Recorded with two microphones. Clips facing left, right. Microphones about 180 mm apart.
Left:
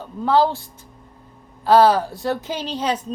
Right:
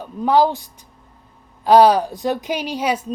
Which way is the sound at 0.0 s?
15° right (ahead or behind).